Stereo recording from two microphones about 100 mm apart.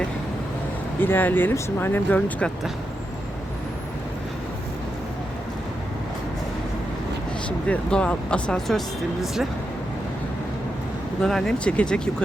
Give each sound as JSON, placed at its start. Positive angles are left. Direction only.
{"t": 0.9, "sound": "speech", "side_deg": 20}
{"t": 7.7, "sound": "speech", "side_deg": 10}
{"t": 11.2, "sound": "speech", "side_deg": 5}